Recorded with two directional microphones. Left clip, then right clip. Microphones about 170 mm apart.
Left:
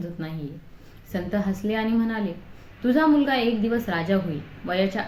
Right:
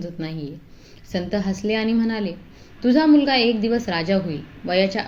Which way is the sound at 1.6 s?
20° right (ahead or behind).